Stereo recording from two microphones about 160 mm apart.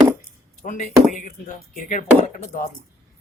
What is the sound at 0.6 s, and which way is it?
Speech, 50° left (ahead or behind).